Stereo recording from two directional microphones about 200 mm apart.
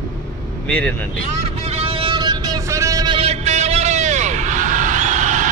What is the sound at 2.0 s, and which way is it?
Music, 20° right (ahead or behind).